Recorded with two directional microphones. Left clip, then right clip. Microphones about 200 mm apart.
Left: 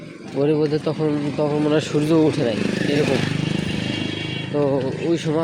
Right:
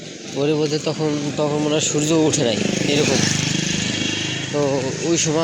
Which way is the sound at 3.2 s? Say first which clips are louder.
Right 5 dB; 45° right (ahead or behind).